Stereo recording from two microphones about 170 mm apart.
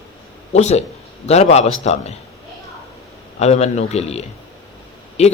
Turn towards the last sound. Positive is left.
turn(degrees=40)  # may be behind; listen again after turning